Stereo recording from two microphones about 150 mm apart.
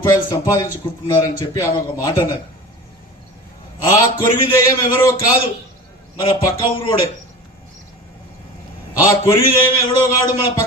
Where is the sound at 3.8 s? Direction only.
30° left (ahead or behind).